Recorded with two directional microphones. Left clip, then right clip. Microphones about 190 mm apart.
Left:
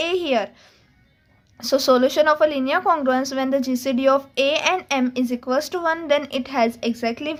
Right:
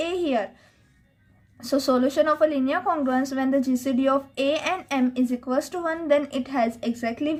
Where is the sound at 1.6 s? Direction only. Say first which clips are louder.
Left 6 dB; 40° left (ahead or behind).